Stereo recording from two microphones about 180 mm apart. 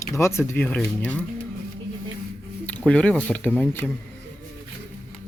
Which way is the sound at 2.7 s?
10° left (ahead or behind).